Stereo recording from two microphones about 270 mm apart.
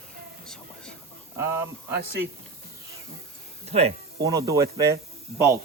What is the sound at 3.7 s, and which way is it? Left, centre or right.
Speech, right.